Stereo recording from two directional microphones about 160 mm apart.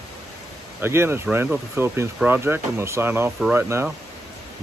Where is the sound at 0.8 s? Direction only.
15° right (ahead or behind).